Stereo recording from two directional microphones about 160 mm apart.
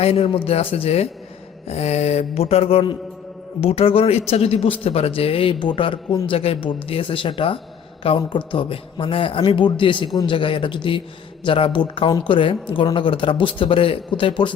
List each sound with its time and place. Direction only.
0.0 s speech: 40° left (ahead or behind)